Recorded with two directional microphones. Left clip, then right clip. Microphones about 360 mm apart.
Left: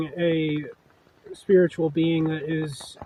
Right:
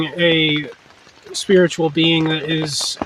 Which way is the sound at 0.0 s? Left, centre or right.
Left.